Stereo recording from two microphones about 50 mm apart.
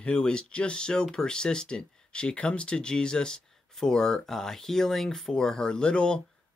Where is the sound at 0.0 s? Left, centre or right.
Centre.